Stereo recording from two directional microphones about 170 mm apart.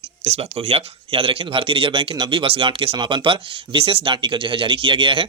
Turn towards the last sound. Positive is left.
turn(degrees=-30)  # may be behind; listen again after turning